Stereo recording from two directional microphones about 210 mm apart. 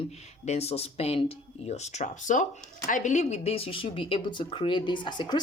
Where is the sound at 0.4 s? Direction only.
30° left (ahead or behind).